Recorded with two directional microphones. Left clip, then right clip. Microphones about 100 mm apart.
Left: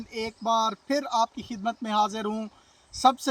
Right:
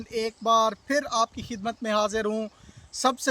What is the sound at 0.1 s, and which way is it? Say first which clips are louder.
Speech: right 3 dB; 25° right (ahead or behind).